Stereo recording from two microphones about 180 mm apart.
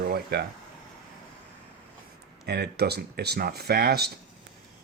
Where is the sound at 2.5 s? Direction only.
65° right (ahead or behind).